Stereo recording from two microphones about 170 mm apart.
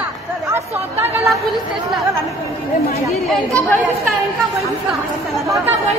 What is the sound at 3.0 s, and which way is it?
Speech, 10° left (ahead or behind).